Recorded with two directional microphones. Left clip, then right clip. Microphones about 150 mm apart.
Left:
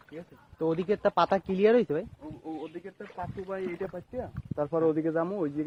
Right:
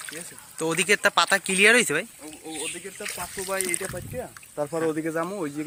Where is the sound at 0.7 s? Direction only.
5° right (ahead or behind).